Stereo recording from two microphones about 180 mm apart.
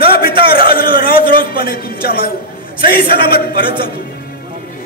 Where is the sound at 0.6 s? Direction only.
55° left (ahead or behind).